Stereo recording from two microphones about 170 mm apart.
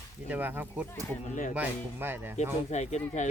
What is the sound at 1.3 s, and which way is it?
Speech, 50° left (ahead or behind).